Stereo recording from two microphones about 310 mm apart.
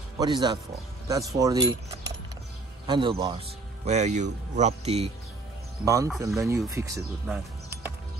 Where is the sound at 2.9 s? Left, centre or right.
Centre.